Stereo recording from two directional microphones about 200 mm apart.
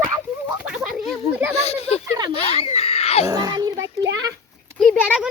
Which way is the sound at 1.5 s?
30° left (ahead or behind).